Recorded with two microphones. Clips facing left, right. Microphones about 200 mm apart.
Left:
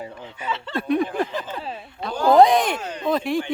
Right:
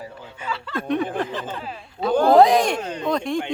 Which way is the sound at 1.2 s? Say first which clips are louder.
Left 1 dB; 10° left (ahead or behind).